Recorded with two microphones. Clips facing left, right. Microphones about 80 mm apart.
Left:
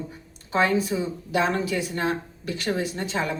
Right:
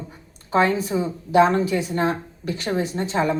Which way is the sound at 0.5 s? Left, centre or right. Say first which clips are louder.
Right 3 dB; right.